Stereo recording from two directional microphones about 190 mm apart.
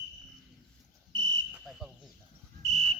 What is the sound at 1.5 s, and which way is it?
Cricket, 5° right (ahead or behind).